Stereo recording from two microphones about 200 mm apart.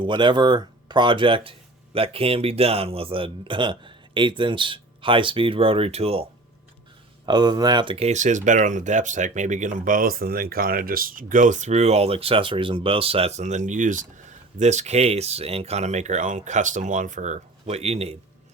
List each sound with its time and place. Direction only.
0.0 s speech: 25° right (ahead or behind)
7.3 s speech: 20° right (ahead or behind)